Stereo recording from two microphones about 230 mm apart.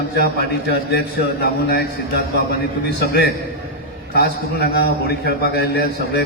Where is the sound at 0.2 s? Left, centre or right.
Left.